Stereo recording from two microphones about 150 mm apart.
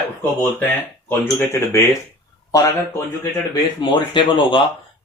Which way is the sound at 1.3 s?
15° left (ahead or behind).